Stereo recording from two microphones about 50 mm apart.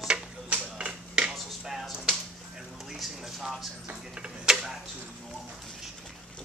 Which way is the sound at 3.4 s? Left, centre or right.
Centre.